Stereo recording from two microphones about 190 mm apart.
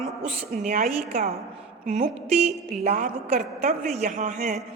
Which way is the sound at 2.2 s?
35° right (ahead or behind).